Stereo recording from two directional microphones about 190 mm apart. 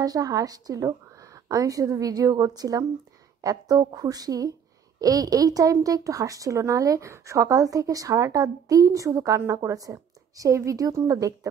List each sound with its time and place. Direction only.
0.0 s speech: 20° right (ahead or behind)